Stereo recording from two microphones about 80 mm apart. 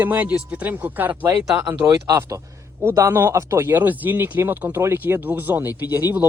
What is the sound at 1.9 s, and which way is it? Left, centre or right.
Speech, right.